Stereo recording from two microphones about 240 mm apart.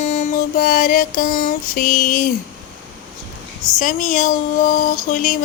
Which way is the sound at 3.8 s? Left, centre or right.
Left.